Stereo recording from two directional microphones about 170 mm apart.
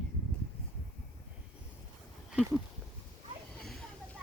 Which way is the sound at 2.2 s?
5° right (ahead or behind).